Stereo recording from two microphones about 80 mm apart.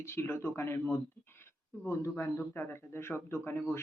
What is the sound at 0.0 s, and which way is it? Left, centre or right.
Speech, left.